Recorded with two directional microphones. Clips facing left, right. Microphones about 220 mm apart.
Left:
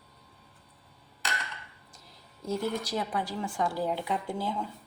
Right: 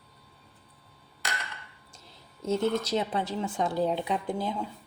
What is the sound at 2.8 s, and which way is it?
A woman's voice, 25° right (ahead or behind).